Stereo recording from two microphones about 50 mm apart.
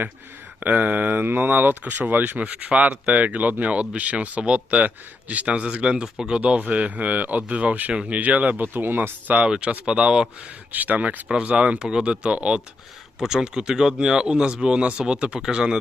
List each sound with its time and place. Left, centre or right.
0.6 s speech: right
9.5 s speech: right
10.7 s speech: right
13.1 s speech: centre